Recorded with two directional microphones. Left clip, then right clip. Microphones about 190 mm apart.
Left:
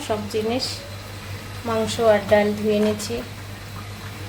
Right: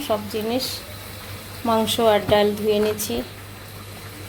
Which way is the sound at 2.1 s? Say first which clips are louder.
Left 2 dB; 35° right (ahead or behind).